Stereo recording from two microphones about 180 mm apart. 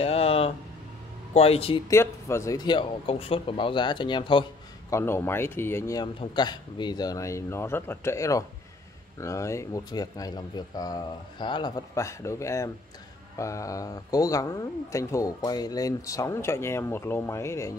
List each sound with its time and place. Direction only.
0.0 s a sound: 35° left (ahead or behind)
1.3 s speech: 35° left (ahead or behind)
1.9 s a man's voice: 15° left (ahead or behind)
4.9 s speech: 15° left (ahead or behind)